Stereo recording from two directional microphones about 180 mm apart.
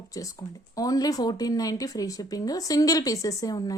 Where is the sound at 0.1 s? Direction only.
20° left (ahead or behind).